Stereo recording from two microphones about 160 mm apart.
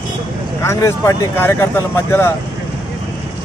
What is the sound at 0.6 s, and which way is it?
Speech, 20° left (ahead or behind).